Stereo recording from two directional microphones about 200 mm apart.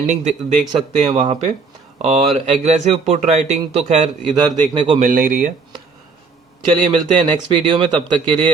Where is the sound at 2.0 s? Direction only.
30° right (ahead or behind).